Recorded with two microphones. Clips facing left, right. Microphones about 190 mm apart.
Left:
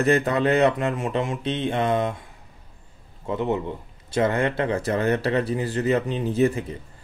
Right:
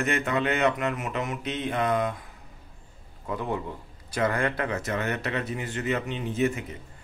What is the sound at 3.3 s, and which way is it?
Speech, 25° left (ahead or behind).